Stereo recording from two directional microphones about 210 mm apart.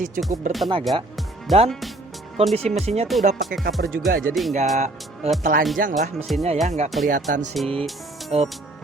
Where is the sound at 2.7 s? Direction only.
35° right (ahead or behind).